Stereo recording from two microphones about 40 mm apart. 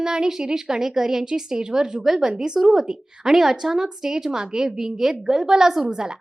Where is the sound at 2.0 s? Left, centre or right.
Centre.